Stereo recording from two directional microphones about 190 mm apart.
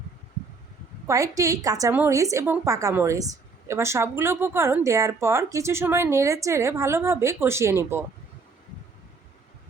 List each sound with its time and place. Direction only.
1.0 s a woman's voice: 15° right (ahead or behind)